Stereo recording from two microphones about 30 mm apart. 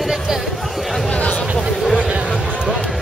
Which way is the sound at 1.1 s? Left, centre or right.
Left.